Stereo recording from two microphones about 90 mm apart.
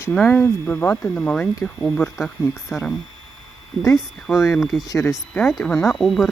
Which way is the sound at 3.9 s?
Centre (ahead or behind).